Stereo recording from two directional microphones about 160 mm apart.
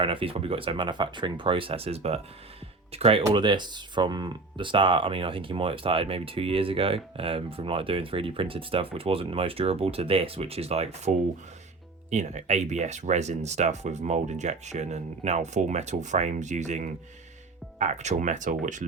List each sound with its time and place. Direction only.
0.0 s speech: 35° right (ahead or behind)
12.1 s speech: 45° right (ahead or behind)